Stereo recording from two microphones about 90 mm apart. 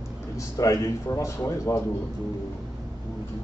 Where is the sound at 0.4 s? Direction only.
40° left (ahead or behind).